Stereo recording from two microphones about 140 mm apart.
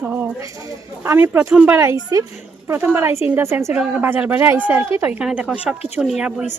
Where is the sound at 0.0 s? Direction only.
10° right (ahead or behind).